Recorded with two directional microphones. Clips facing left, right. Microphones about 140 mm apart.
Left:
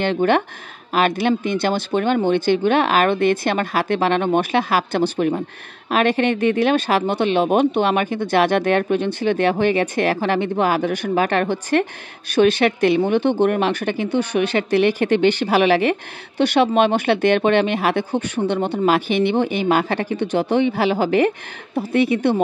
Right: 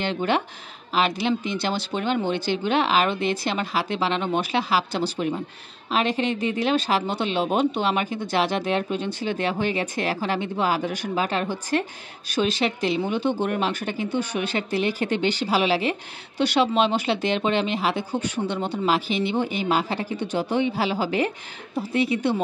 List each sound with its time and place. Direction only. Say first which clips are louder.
0.0 s speech: left 6 dB; 55° left (ahead or behind)